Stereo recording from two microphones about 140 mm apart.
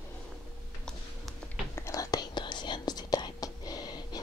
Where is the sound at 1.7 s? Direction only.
25° left (ahead or behind).